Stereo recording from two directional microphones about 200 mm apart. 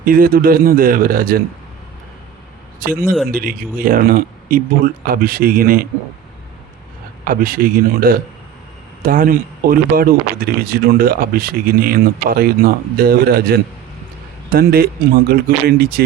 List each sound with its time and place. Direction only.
0.0 s speech: 45° right (ahead or behind)
3.0 s speech: centre (ahead or behind)
3.2 s speech: 45° right (ahead or behind)
7.3 s speech: 45° right (ahead or behind)